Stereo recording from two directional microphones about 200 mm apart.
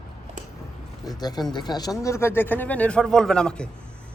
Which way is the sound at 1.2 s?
20° left (ahead or behind).